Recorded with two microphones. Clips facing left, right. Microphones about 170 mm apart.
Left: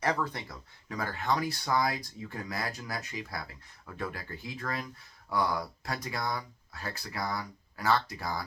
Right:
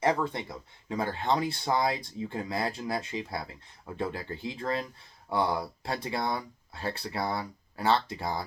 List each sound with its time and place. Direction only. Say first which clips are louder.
0.0 s speech: right 4 dB; 25° right (ahead or behind)